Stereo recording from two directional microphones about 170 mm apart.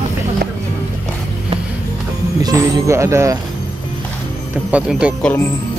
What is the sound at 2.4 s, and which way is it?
Speech, 20° right (ahead or behind).